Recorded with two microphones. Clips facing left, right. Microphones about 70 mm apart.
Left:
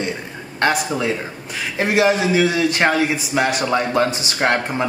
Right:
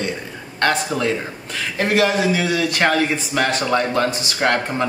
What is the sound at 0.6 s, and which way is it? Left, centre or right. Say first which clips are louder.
A man's voice: even; centre.